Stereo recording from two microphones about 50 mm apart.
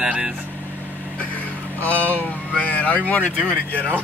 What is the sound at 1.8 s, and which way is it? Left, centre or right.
Speech, left.